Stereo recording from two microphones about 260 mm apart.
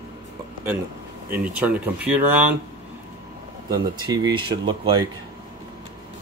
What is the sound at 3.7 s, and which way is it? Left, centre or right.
Speech, centre.